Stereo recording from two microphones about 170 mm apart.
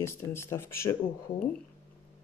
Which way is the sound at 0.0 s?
15° left (ahead or behind).